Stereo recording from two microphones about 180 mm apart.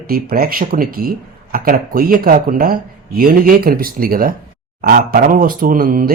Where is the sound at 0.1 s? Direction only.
55° right (ahead or behind).